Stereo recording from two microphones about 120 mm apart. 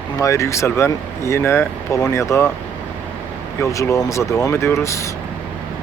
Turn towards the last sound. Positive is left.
turn(degrees=25)  # may be behind; listen again after turning